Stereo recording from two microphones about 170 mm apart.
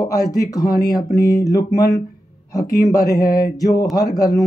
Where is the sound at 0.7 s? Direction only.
60° left (ahead or behind).